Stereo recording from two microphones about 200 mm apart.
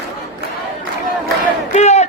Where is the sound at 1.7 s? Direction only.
35° left (ahead or behind).